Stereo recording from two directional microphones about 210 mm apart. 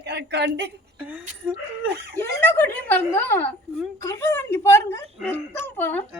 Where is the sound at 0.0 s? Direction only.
55° right (ahead or behind).